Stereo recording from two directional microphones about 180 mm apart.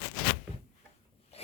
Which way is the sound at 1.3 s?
35° left (ahead or behind).